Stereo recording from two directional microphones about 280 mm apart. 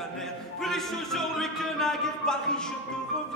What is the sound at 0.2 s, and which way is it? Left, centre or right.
Music, centre.